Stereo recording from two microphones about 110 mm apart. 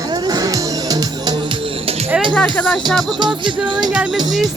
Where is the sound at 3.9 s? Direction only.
10° right (ahead or behind).